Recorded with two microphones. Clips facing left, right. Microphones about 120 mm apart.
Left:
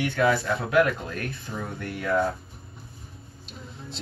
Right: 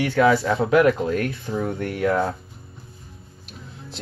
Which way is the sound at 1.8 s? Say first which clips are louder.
Right 4 dB; 70° right (ahead or behind).